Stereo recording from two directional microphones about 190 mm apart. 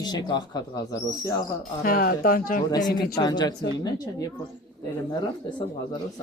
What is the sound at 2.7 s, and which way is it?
Speech, 20° left (ahead or behind).